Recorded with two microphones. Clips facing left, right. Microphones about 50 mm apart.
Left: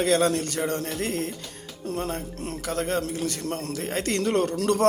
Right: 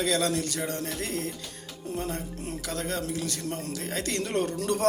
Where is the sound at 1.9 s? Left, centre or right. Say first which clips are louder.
Left 2 dB; left.